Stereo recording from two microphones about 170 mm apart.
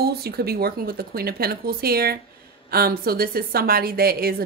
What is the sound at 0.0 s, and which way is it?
Speech, 65° right (ahead or behind).